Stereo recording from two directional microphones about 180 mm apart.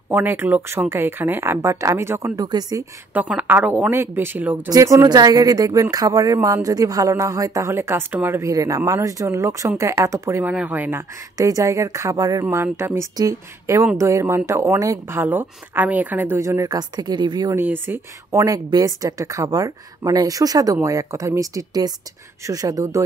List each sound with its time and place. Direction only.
0.1 s speech: 10° right (ahead or behind)
3.1 s speech: 10° right (ahead or behind)
17.6 s speech: 10° right (ahead or behind)